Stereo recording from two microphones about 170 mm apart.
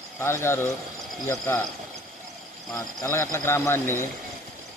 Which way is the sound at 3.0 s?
15° left (ahead or behind).